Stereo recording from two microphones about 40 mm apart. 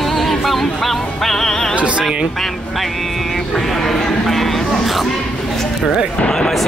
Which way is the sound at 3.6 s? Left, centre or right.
Centre.